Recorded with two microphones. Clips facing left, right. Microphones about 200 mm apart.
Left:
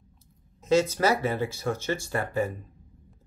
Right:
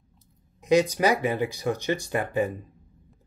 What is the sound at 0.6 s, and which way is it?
Speech, 15° right (ahead or behind).